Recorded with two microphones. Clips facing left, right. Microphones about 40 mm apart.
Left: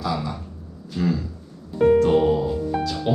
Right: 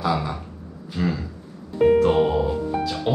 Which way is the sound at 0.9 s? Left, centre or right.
Centre.